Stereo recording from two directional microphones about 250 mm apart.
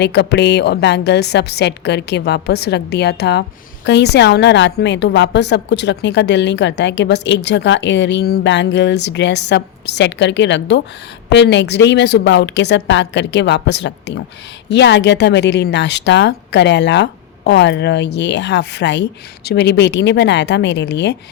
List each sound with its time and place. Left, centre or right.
0.0 s a woman's voice: left